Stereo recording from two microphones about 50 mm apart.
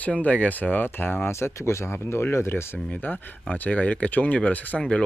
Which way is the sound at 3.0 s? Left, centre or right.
Left.